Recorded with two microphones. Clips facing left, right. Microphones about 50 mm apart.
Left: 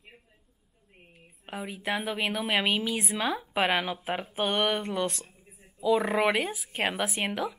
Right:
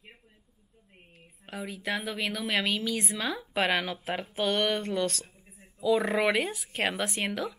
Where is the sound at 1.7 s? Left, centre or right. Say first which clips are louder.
Left 2 dB; left.